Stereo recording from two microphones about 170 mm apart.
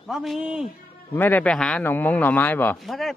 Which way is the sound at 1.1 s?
10° left (ahead or behind).